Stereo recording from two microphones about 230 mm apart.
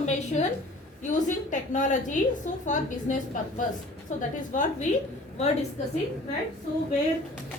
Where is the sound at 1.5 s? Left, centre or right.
Left.